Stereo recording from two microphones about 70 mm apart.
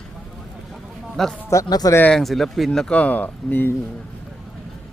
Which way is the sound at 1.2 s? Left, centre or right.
Centre.